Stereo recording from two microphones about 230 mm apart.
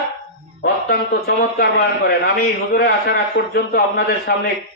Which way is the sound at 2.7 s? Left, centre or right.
Left.